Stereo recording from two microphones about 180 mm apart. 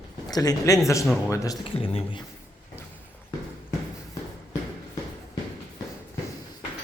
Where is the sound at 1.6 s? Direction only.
30° left (ahead or behind).